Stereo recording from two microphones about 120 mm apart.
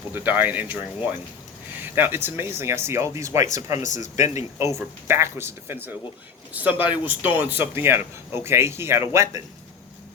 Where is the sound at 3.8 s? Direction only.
90° left.